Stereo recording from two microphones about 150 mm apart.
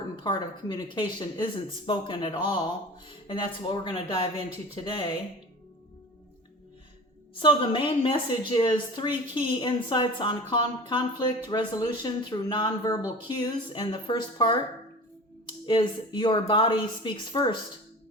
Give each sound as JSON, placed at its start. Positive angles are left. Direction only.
{"t": 0.2, "sound": "a woman's voice", "side_deg": 30}
{"t": 7.3, "sound": "a woman's voice", "side_deg": 35}
{"t": 15.6, "sound": "a woman's voice", "side_deg": 35}